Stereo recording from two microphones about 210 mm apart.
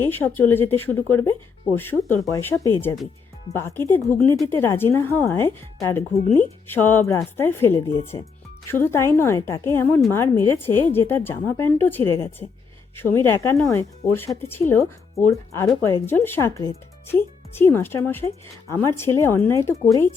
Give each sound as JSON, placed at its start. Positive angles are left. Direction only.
{"t": 0.0, "sound": "speech", "side_deg": 10}